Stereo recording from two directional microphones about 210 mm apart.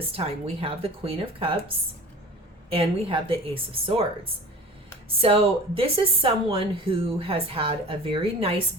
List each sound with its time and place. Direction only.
0.1 s speech: 25° right (ahead or behind)